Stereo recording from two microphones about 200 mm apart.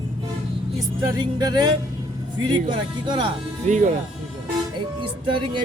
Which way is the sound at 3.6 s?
35° right (ahead or behind).